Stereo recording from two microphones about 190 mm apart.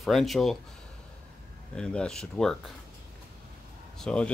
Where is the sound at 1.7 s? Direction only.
5° left (ahead or behind).